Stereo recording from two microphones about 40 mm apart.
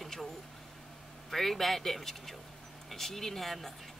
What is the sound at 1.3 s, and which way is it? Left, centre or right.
A woman's voice, centre.